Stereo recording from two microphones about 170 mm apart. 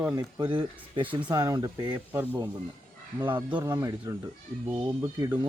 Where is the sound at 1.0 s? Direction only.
10° right (ahead or behind).